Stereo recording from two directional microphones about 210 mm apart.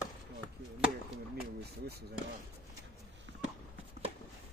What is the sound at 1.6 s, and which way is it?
Speech, 50° right (ahead or behind).